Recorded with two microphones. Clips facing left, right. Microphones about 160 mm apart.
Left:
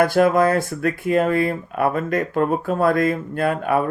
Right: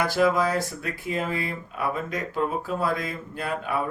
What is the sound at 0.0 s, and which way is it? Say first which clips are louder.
Speech: left 6 dB; 55° left (ahead or behind).